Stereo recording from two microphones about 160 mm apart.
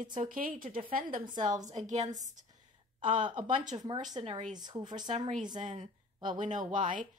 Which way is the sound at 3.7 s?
25° right (ahead or behind).